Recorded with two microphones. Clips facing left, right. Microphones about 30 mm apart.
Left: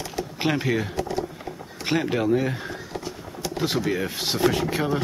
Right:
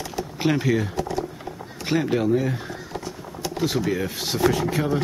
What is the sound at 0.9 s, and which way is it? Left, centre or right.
Typing, centre.